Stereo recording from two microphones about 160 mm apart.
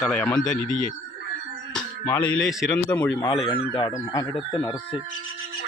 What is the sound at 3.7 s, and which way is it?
Speech, 30° left (ahead or behind).